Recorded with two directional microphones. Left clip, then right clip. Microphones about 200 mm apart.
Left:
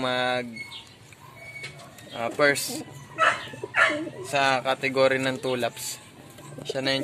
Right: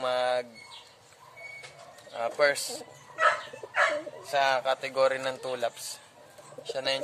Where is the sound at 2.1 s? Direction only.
Centre (ahead or behind).